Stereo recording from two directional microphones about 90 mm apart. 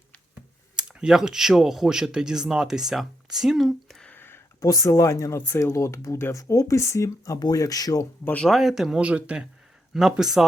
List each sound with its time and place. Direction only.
0.8 s speech: 10° right (ahead or behind)
4.0 s a sound: 20° left (ahead or behind)
4.6 s speech: 40° left (ahead or behind)
8.2 s speech: 20° left (ahead or behind)
8.4 s speech: centre (ahead or behind)